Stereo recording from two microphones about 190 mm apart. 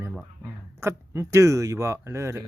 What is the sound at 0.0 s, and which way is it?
Speech, 10° right (ahead or behind).